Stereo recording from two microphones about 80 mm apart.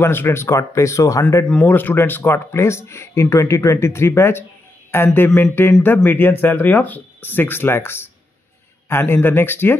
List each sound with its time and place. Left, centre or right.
0.0 s speech: left
1.4 s speech: centre
1.7 s speech: left